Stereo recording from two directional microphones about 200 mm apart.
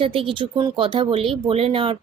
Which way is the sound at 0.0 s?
25° right (ahead or behind).